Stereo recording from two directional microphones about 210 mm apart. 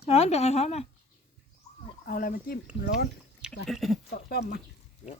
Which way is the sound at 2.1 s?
40° left (ahead or behind).